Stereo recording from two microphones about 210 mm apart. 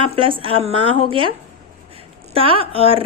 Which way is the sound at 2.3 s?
25° right (ahead or behind).